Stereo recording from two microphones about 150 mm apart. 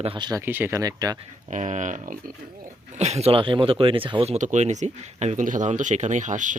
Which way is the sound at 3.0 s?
45° right (ahead or behind).